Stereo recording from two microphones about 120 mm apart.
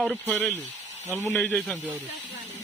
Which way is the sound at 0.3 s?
15° left (ahead or behind).